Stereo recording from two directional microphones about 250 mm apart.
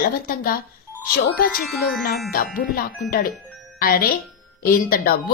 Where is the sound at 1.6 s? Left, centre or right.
Centre.